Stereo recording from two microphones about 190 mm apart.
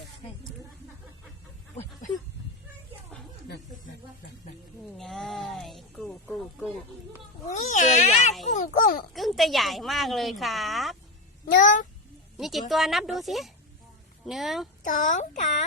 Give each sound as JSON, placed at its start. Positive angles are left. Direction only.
{"t": 1.7, "sound": "a sound", "side_deg": 40}
{"t": 4.9, "sound": "music", "side_deg": 0}
{"t": 7.4, "sound": "cat", "side_deg": 40}
{"t": 8.4, "sound": "a sound", "side_deg": 40}
{"t": 9.1, "sound": "a woman's voice", "side_deg": 0}
{"t": 11.6, "sound": "a child's voice", "side_deg": 40}
{"t": 12.4, "sound": "a woman's voice", "side_deg": 0}
{"t": 14.8, "sound": "speech", "side_deg": 45}